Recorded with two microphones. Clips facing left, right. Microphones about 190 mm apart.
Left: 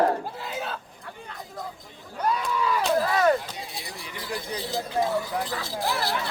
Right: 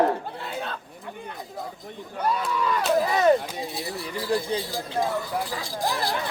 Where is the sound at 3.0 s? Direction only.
20° right (ahead or behind).